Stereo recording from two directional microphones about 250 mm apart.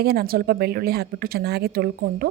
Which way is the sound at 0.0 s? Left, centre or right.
Right.